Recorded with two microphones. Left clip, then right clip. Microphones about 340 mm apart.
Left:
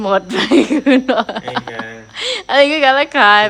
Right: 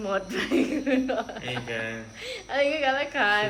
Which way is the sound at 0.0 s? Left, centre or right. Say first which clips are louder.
Left 13 dB; centre.